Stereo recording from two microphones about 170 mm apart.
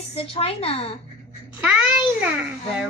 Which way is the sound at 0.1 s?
35° left (ahead or behind).